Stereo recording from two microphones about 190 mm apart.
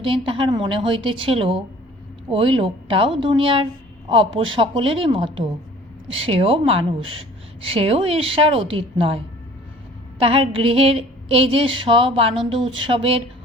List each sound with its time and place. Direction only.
0.0 s a woman's voice: 25° right (ahead or behind)